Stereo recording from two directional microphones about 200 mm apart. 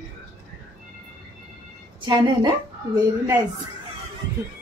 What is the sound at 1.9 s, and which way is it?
Speech, 25° right (ahead or behind).